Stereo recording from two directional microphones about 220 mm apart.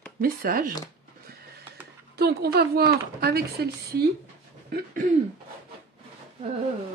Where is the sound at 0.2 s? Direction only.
40° right (ahead or behind).